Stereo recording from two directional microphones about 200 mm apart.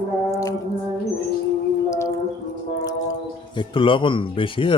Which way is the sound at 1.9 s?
15° left (ahead or behind).